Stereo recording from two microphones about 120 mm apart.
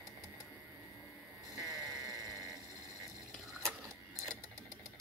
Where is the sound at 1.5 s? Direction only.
Centre (ahead or behind).